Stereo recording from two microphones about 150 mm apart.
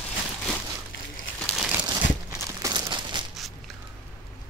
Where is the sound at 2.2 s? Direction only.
20° right (ahead or behind).